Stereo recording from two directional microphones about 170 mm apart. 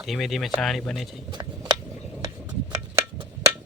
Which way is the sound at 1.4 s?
25° right (ahead or behind).